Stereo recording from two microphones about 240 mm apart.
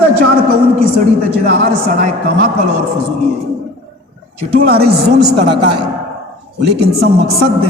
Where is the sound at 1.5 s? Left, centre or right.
Right.